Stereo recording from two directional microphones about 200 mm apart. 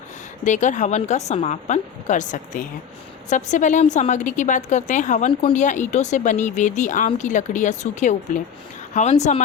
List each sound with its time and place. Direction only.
0.4 s a woman's voice: 35° left (ahead or behind)